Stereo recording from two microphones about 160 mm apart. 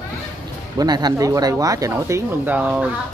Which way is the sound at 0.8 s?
25° right (ahead or behind).